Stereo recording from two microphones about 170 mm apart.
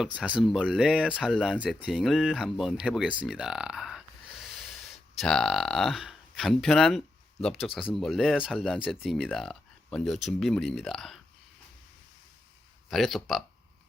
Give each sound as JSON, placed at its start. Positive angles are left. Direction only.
{"t": 0.0, "sound": "speech", "side_deg": -5}
{"t": 12.9, "sound": "speech", "side_deg": 0}